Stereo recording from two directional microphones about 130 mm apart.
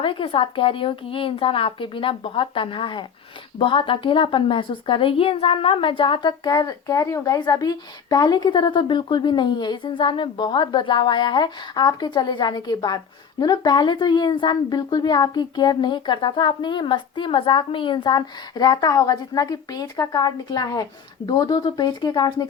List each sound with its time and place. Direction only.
0.0 s a woman's voice: 45° left (ahead or behind)